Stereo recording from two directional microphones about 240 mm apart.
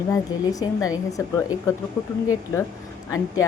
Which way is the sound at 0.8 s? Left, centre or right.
Centre.